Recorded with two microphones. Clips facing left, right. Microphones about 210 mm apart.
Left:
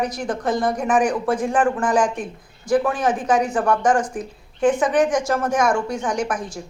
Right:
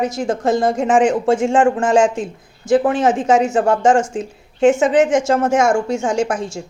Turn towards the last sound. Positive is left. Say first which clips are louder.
# right 5 dB
turn(degrees=-25)  # may be behind; listen again after turning